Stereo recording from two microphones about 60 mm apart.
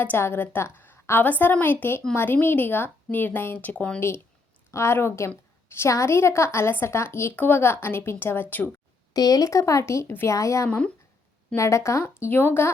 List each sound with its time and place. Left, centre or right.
0.0 s a woman's voice: left
4.7 s a woman's voice: left
9.1 s speech: left
10.7 s speech: left
11.5 s a woman's voice: left